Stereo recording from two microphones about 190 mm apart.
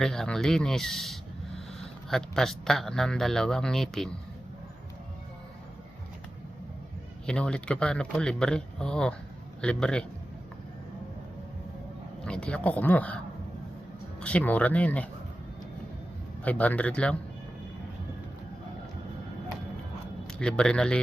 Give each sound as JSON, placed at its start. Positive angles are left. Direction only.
{"t": 0.0, "sound": "a man's voice", "side_deg": 0}
{"t": 7.3, "sound": "a man's voice", "side_deg": 5}
{"t": 12.2, "sound": "a man's voice", "side_deg": 5}
{"t": 16.4, "sound": "a man's voice", "side_deg": 5}
{"t": 20.2, "sound": "speech", "side_deg": 5}